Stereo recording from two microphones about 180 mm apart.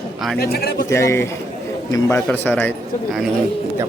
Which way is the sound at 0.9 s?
15° left (ahead or behind).